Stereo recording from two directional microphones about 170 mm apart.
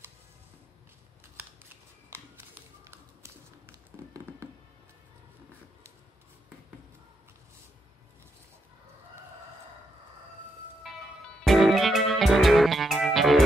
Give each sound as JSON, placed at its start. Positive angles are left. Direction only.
{"t": 2.8, "sound": "tap", "side_deg": -15}
{"t": 10.9, "sound": "music", "side_deg": 0}